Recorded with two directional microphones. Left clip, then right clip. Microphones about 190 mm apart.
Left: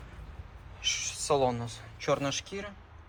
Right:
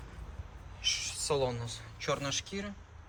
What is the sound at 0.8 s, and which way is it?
Speech, 5° right (ahead or behind).